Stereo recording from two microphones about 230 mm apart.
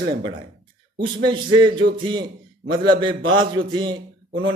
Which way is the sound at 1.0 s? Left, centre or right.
Centre.